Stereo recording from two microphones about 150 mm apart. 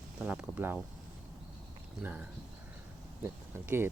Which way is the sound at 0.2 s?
5° right (ahead or behind).